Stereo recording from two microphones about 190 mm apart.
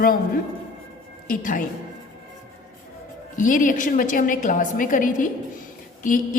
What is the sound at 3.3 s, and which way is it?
A woman's voice, 45° left (ahead or behind).